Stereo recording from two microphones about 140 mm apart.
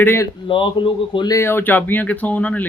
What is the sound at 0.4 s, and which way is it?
Speech, 35° left (ahead or behind).